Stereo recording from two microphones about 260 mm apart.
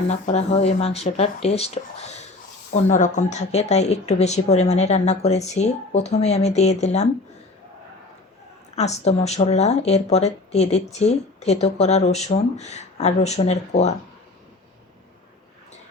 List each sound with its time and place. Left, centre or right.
0.1 s speech: left
8.7 s speech: left